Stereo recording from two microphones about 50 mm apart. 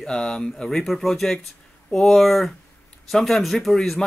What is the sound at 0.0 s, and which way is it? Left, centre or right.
Speech, centre.